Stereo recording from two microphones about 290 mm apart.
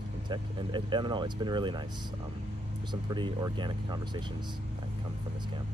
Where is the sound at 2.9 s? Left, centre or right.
Centre.